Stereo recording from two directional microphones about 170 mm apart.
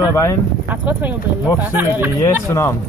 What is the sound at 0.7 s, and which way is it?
Speech, 10° right (ahead or behind).